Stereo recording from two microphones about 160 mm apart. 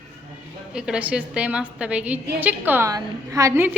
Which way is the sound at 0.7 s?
5° right (ahead or behind).